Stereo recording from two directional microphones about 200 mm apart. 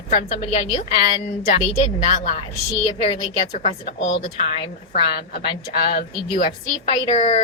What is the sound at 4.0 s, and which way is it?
Speech, 70° left (ahead or behind).